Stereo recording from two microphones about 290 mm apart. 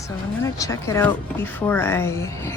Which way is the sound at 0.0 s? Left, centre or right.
Centre.